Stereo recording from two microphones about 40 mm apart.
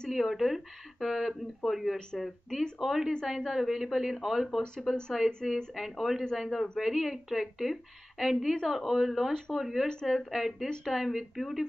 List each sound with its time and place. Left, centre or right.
0.1 s speech: centre